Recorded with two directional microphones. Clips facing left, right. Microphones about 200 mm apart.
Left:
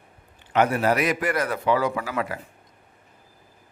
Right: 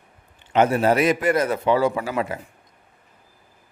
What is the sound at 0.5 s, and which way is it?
A man's voice, 25° right (ahead or behind).